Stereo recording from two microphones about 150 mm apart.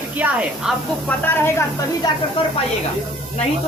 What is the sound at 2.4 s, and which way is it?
Speech, 35° left (ahead or behind).